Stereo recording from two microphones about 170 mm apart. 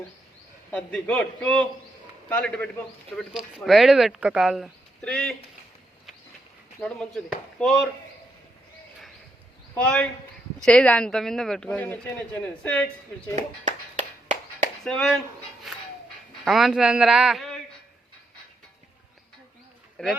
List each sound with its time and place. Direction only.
0.7 s a man's voice: 5° left (ahead or behind)
6.7 s speech: 5° left (ahead or behind)
9.7 s a man's voice: 10° left (ahead or behind)
13.3 s clapping: 45° right (ahead or behind)
14.8 s speech: 5° left (ahead or behind)
16.4 s speech: centre (ahead or behind)
20.0 s speech: 5° left (ahead or behind)